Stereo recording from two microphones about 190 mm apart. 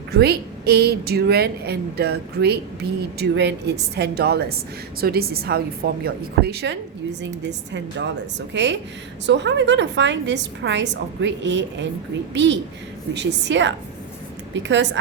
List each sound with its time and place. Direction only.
0.1 s a woman's voice: 60° right (ahead or behind)